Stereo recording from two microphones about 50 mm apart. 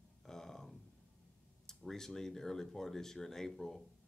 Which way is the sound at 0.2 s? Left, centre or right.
Centre.